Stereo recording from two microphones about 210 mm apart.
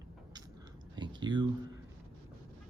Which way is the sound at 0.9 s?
20° right (ahead or behind).